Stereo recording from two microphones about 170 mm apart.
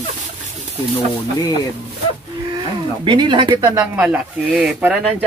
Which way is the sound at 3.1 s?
30° right (ahead or behind).